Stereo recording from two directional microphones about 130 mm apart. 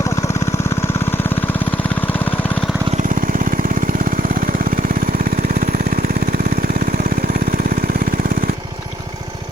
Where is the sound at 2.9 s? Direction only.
90° right.